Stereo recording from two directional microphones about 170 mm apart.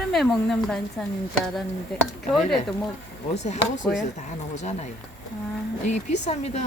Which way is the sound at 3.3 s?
40° left (ahead or behind).